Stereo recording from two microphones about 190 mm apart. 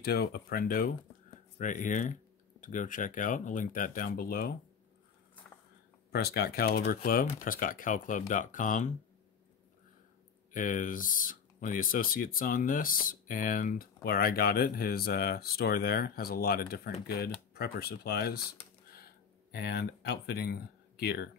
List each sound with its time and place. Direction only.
0.0 s speech: 55° left (ahead or behind)
6.1 s speech: 55° left (ahead or behind)
10.5 s speech: 45° left (ahead or behind)